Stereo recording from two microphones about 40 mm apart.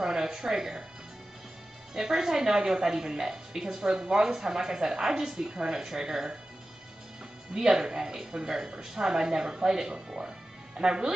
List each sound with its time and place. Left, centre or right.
0.0 s speech: centre
2.0 s a woman's voice: centre
7.5 s a woman's voice: centre